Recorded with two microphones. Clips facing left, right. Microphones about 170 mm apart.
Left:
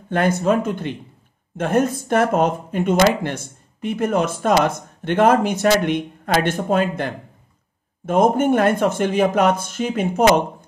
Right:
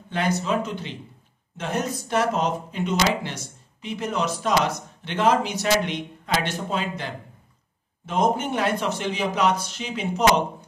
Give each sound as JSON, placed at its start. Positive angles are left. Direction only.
{"t": 0.1, "sound": "speech", "side_deg": 50}